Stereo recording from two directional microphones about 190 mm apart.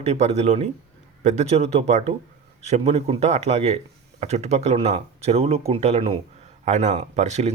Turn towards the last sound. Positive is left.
turn(degrees=-35)  # may be behind; listen again after turning